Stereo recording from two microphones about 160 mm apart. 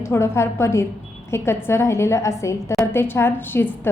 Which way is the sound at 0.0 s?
15° left (ahead or behind).